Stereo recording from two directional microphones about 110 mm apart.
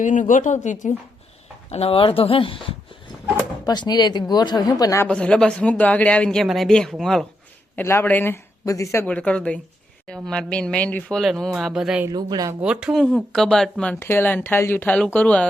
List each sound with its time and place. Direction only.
0.4 s a woman's voice: 90° left
1.7 s speech: 60° left (ahead or behind)
3.6 s speech: 40° left (ahead or behind)
5.0 s speech: 10° left (ahead or behind)
7.8 s speech: 20° left (ahead or behind)
9.0 s speech: 10° left (ahead or behind)
11.2 s speech: centre (ahead or behind)
12.1 s speech: 35° right (ahead or behind)
12.5 s speech: 10° right (ahead or behind)
13.0 s speech: 5° left (ahead or behind)
14.0 s speech: 20° left (ahead or behind)